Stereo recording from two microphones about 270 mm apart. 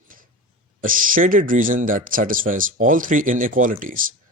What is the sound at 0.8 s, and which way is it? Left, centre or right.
Speech, right.